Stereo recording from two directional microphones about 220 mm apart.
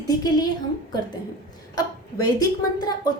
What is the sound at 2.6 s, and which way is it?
Speech, 15° left (ahead or behind).